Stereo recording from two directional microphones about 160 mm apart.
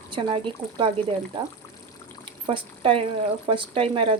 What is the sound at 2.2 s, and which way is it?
Pour, 35° right (ahead or behind).